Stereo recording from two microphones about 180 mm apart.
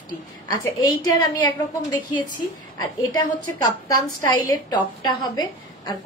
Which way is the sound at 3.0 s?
20° left (ahead or behind).